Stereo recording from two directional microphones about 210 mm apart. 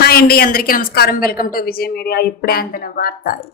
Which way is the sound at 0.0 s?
45° left (ahead or behind).